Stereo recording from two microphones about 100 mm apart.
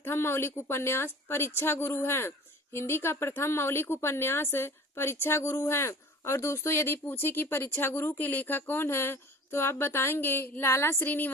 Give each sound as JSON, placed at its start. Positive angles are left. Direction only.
{"t": 0.0, "sound": "speech", "side_deg": 25}